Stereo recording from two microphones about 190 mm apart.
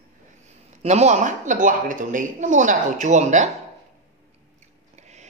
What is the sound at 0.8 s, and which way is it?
A woman's voice, 35° right (ahead or behind).